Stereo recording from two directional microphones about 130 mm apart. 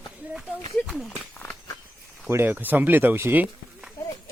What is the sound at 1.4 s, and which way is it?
Walk, 15° left (ahead or behind).